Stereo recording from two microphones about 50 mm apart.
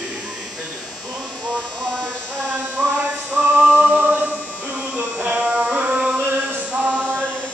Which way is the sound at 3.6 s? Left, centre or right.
Right.